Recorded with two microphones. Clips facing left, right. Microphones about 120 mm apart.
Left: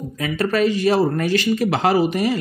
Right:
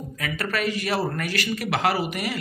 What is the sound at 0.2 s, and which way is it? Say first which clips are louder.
Speech: left 8 dB; 25° left (ahead or behind).